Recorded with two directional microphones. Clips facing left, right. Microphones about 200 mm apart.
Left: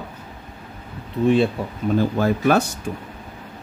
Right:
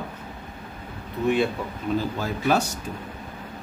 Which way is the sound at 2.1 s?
60° left (ahead or behind).